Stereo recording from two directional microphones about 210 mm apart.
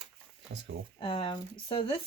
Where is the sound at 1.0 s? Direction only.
25° left (ahead or behind).